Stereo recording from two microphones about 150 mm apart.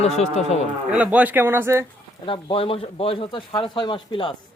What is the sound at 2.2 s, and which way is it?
Speech, 35° left (ahead or behind).